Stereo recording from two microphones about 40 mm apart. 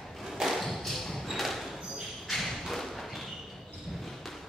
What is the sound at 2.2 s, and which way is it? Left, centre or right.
Thump, centre.